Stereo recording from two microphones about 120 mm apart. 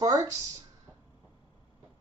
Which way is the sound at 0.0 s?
30° right (ahead or behind).